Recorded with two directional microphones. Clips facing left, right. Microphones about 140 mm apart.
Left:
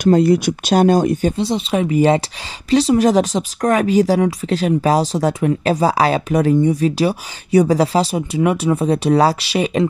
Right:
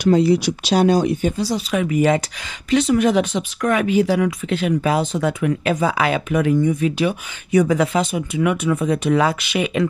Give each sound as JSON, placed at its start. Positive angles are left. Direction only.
{"t": 0.0, "sound": "speech", "side_deg": 50}
{"t": 1.4, "sound": "speech", "side_deg": 25}